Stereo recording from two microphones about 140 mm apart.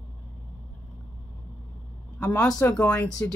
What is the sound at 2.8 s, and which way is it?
Speech, 15° left (ahead or behind).